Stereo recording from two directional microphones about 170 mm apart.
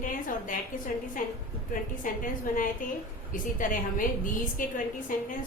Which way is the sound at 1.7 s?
50° left (ahead or behind).